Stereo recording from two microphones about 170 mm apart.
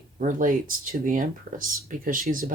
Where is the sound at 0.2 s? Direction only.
50° right (ahead or behind).